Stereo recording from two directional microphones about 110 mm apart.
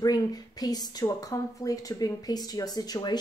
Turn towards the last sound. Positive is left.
turn(degrees=40)  # may be behind; listen again after turning